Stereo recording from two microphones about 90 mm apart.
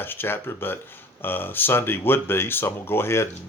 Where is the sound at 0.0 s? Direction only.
25° left (ahead or behind).